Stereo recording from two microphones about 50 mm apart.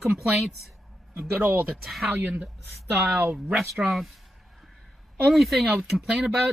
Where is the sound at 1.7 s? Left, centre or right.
Centre.